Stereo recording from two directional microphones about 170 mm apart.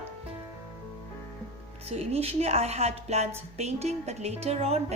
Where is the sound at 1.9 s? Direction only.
35° right (ahead or behind).